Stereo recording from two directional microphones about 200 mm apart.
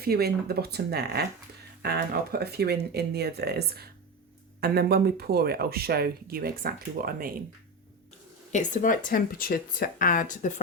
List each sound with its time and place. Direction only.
0.0 s speech: 50° right (ahead or behind)
8.5 s speech: 40° left (ahead or behind)